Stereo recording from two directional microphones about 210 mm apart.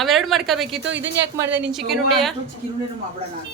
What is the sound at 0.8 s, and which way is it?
Speech, 60° right (ahead or behind).